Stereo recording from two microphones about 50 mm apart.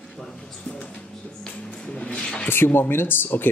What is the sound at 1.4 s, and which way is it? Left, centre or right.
Music, left.